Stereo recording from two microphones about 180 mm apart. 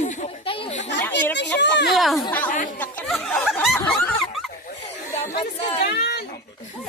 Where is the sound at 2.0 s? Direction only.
Centre (ahead or behind).